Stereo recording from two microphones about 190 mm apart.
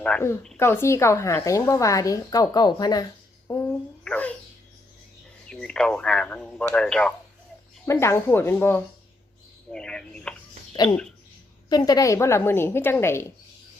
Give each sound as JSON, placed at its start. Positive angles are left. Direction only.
{"t": 0.0, "sound": "a woman's voice", "side_deg": 10}
{"t": 5.5, "sound": "speech", "side_deg": 5}
{"t": 7.9, "sound": "a woman's voice", "side_deg": 15}
{"t": 11.7, "sound": "a woman's voice", "side_deg": 20}